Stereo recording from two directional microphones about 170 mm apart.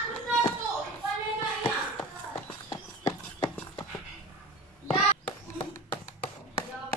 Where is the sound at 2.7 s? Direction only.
25° left (ahead or behind).